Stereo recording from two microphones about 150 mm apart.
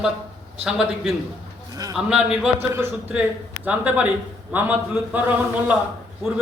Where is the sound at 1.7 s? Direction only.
25° right (ahead or behind).